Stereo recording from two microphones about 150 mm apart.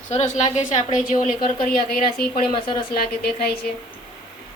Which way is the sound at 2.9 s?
90° left.